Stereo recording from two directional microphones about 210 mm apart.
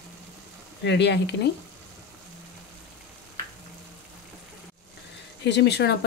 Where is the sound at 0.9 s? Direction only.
55° left (ahead or behind).